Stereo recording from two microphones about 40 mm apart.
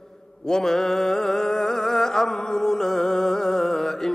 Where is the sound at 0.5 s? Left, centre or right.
Centre.